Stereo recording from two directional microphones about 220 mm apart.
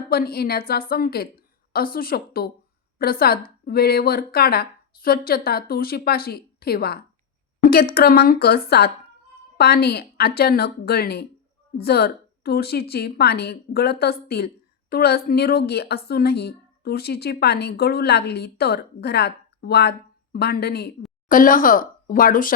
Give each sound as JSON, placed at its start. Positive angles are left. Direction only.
{"t": 0.1, "sound": "speech", "side_deg": 45}